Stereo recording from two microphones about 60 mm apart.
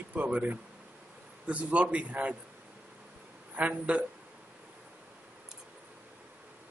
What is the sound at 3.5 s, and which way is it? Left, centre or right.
Speech, right.